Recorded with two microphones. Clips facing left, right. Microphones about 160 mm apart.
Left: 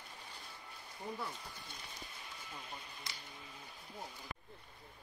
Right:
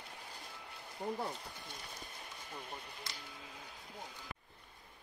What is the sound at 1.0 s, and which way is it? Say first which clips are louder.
Speech: right 5 dB; 60° right (ahead or behind).